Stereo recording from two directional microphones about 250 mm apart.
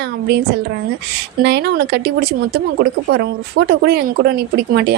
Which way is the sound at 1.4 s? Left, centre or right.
Right.